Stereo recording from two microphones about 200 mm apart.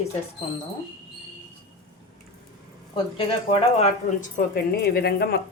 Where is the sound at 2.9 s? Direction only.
30° left (ahead or behind).